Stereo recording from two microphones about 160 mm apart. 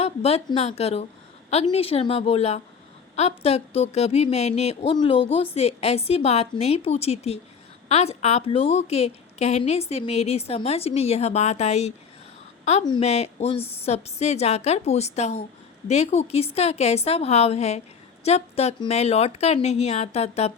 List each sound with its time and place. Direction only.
0.0 s a woman's voice: 40° left (ahead or behind)
13.0 s a woman's voice: 40° left (ahead or behind)